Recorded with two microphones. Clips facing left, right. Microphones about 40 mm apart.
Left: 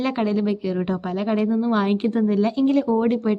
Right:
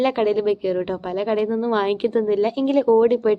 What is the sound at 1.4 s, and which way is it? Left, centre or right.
A woman's voice, centre.